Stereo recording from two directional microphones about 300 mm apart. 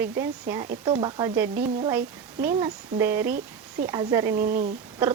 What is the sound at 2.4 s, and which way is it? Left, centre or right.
Speech, centre.